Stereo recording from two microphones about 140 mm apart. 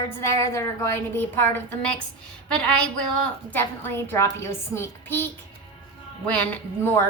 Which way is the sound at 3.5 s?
15° left (ahead or behind).